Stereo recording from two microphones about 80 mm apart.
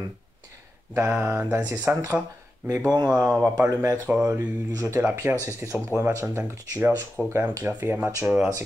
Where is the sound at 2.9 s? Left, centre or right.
Right.